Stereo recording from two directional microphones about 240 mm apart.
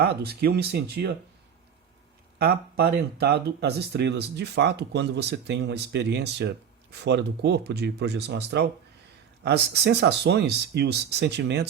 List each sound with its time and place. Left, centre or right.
0.0 s speech: right
2.4 s speech: right